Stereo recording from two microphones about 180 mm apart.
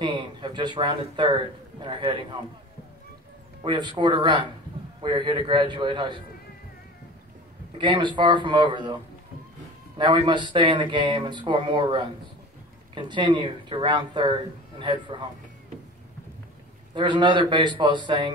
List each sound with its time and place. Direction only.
0.0 s a man's voice: 25° right (ahead or behind)
4.0 s speech: 25° right (ahead or behind)
7.7 s speech: 25° right (ahead or behind)
9.9 s speech: 25° right (ahead or behind)
16.9 s speech: 25° right (ahead or behind)